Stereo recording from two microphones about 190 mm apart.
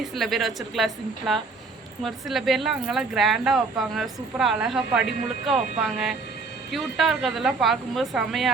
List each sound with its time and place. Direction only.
0.1 s speech: centre (ahead or behind)